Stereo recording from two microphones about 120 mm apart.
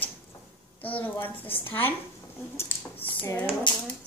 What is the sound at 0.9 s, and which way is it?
Speech, 15° left (ahead or behind).